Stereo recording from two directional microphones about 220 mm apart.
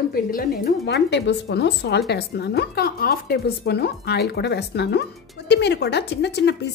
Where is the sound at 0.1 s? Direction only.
40° left (ahead or behind).